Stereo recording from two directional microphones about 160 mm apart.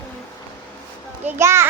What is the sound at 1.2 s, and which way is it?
Speech, 15° right (ahead or behind).